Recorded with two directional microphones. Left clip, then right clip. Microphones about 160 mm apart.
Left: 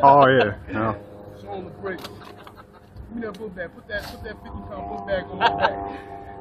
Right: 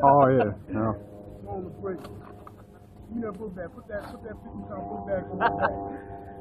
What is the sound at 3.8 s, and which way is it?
Speech, 45° left (ahead or behind).